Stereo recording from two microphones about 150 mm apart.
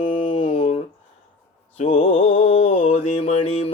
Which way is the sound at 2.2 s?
40° left (ahead or behind).